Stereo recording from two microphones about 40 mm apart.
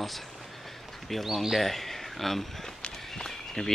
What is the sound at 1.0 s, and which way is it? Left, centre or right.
Speech, centre.